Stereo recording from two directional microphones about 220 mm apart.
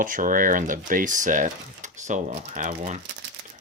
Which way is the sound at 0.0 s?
40° right (ahead or behind).